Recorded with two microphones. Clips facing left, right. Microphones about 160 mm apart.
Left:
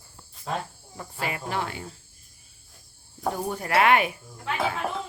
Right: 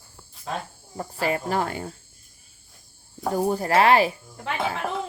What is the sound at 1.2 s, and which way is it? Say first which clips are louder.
Speech: right 5 dB; 40° right (ahead or behind).